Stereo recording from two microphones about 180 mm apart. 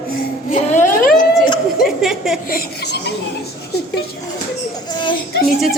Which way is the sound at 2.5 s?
60° left (ahead or behind).